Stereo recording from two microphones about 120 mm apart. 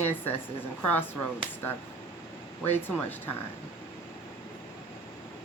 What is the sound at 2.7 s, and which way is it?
Speech, 15° left (ahead or behind).